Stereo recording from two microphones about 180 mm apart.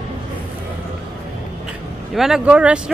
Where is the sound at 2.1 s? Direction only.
Centre (ahead or behind).